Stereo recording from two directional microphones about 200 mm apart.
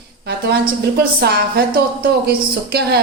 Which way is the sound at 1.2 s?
50° right (ahead or behind).